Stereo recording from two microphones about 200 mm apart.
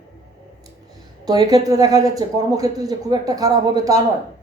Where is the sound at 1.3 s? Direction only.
20° right (ahead or behind).